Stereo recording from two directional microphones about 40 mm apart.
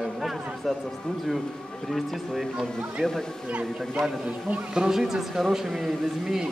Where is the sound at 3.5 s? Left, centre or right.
Right.